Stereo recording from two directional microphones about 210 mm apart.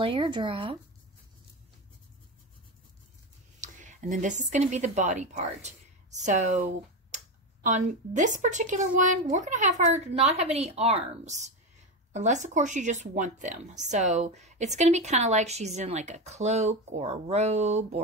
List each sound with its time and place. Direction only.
0.0 s speech: 25° right (ahead or behind)
3.6 s a woman's voice: 35° right (ahead or behind)